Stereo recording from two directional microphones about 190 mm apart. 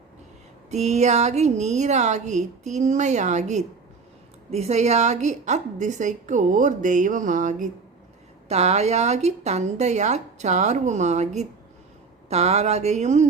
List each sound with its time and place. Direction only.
0.7 s a woman's voice: 35° right (ahead or behind)